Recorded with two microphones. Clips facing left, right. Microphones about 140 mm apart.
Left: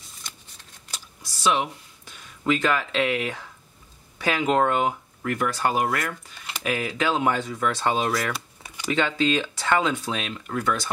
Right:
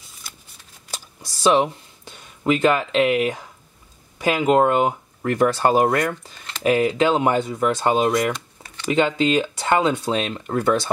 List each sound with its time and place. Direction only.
0.2 s shuffling cards: 5° right (ahead or behind)
0.9 s speech: 35° right (ahead or behind); by 4.9 s 20° right (ahead or behind)
5.2 s speech: 35° right (ahead or behind)
8.3 s a sound: 10° left (ahead or behind)
8.8 s speech: 20° right (ahead or behind)